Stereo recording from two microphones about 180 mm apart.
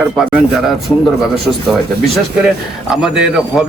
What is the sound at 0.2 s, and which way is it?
Speech, 5° right (ahead or behind).